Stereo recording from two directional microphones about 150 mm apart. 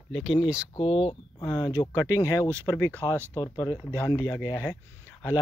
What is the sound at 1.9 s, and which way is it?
Speech, 20° left (ahead or behind).